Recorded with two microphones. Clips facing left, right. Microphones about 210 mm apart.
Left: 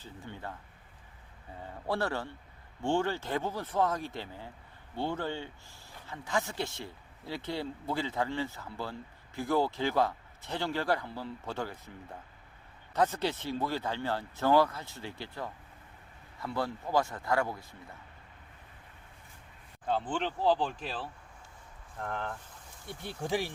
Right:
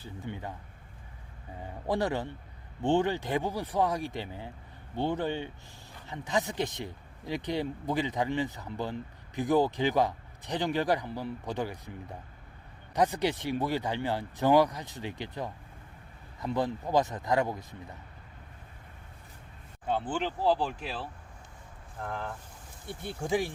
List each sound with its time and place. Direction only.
0.0 s speech: 15° right (ahead or behind)
1.9 s speech: 15° right (ahead or behind)
19.9 s speech: 5° right (ahead or behind)